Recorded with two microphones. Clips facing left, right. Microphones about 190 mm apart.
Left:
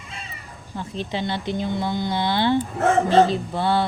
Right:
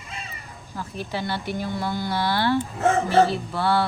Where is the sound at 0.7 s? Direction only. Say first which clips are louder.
Left 2 dB; 20° left (ahead or behind).